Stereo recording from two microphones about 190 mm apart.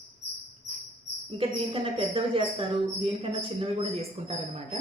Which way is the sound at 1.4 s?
30° right (ahead or behind).